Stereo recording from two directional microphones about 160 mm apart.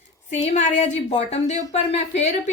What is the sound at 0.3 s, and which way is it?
Speech, 45° left (ahead or behind).